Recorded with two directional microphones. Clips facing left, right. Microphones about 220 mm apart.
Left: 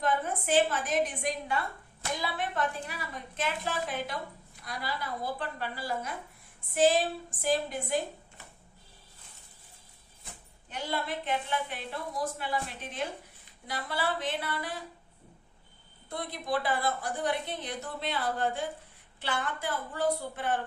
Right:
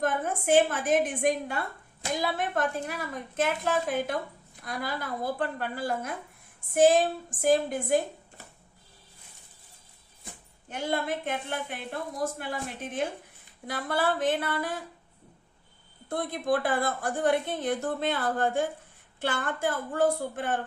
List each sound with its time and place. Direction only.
0.0 s a woman's voice: 50° right (ahead or behind)
10.7 s a woman's voice: 50° right (ahead or behind)
16.0 s a woman's voice: 50° right (ahead or behind)